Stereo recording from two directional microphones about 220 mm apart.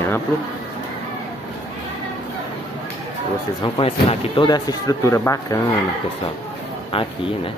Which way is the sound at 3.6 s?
25° left (ahead or behind).